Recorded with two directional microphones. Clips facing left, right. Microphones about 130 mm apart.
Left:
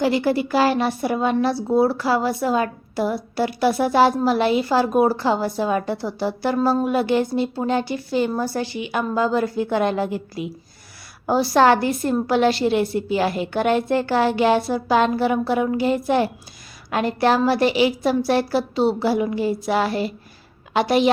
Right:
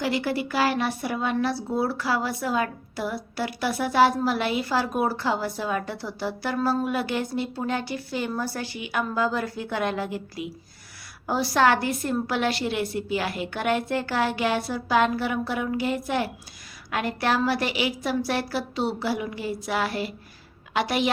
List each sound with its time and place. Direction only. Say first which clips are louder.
0.0 s a woman's voice: left 7 dB; 30° left (ahead or behind)